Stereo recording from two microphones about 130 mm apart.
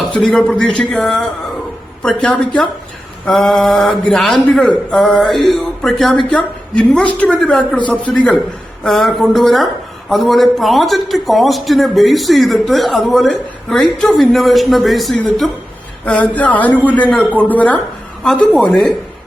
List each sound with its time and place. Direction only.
0.1 s a man's voice: 5° left (ahead or behind)